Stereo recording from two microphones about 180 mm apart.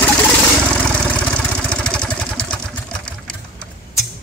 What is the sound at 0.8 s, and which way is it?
Vehicle, 5° left (ahead or behind).